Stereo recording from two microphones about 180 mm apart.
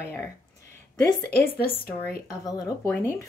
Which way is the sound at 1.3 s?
55° left (ahead or behind).